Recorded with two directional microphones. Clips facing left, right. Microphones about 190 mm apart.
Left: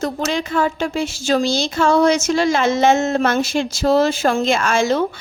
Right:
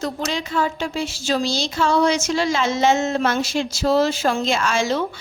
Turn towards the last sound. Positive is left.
turn(degrees=50)  # may be behind; listen again after turning